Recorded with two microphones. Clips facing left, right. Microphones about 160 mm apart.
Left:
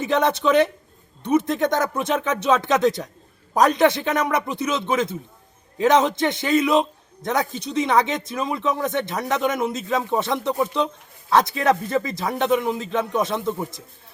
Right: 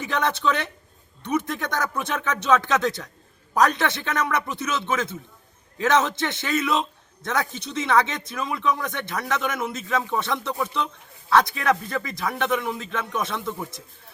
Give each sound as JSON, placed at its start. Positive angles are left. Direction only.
{"t": 0.0, "sound": "a man's voice", "side_deg": 20}